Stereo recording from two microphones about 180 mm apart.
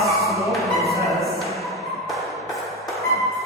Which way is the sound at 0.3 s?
Centre (ahead or behind).